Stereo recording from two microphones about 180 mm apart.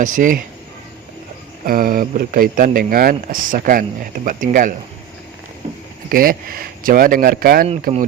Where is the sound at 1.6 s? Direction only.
50° right (ahead or behind).